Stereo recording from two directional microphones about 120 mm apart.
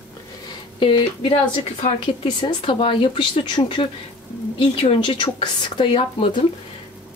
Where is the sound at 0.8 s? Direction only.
45° left (ahead or behind).